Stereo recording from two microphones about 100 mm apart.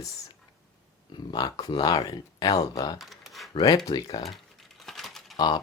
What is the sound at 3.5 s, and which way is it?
Speech, 40° left (ahead or behind).